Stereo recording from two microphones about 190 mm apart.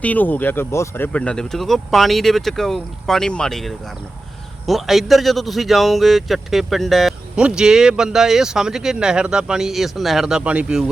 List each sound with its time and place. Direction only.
0.0 s speech: 10° left (ahead or behind)